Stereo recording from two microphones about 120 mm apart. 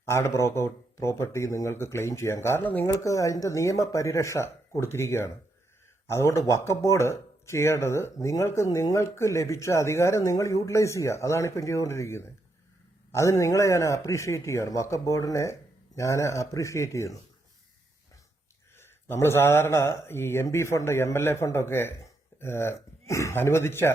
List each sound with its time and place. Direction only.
0.0 s speech: 25° left (ahead or behind)
3.0 s speech: 25° left (ahead or behind)
18.8 s speech: 20° left (ahead or behind)